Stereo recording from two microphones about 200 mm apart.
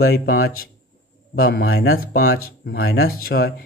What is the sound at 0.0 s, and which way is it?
Speech, 50° left (ahead or behind).